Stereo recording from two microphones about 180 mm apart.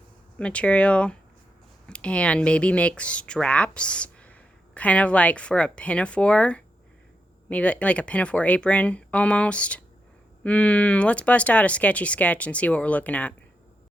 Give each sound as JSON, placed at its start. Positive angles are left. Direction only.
{"t": 0.3, "sound": "speech", "side_deg": 5}